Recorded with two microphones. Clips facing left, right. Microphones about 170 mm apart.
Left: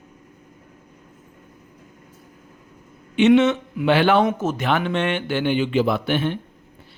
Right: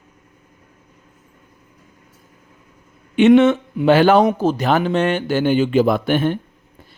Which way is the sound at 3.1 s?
50° right (ahead or behind).